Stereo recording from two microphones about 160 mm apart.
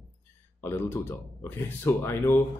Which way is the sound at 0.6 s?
15° left (ahead or behind).